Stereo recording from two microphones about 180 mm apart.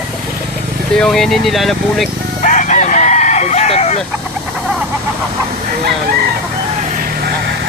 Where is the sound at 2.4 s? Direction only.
45° left (ahead or behind).